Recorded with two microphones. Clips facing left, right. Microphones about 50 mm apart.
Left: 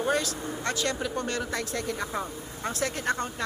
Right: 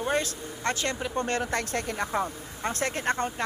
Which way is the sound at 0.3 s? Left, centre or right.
Right.